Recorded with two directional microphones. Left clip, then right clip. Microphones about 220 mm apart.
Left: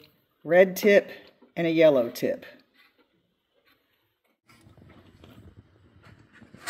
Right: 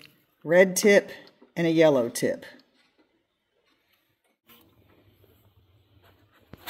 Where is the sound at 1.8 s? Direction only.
25° right (ahead or behind).